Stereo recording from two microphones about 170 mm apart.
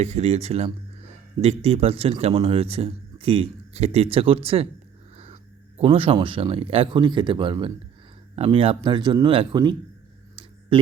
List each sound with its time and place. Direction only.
0.0 s a man's voice: 40° right (ahead or behind)